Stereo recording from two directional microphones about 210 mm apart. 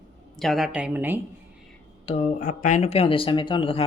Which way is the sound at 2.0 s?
30° left (ahead or behind).